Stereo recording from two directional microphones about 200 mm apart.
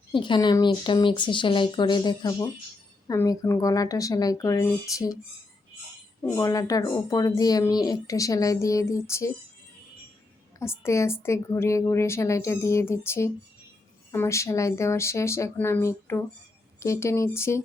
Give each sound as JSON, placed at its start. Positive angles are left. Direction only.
{"t": 0.1, "sound": "speech", "side_deg": 25}
{"t": 6.2, "sound": "speech", "side_deg": 15}
{"t": 10.6, "sound": "speech", "side_deg": 15}